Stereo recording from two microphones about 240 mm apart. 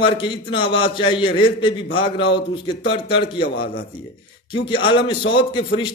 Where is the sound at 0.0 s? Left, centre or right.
Centre.